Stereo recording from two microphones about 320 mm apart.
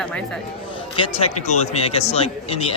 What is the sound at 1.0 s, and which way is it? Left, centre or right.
Speech, centre.